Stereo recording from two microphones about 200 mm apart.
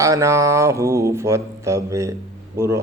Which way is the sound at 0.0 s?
15° right (ahead or behind).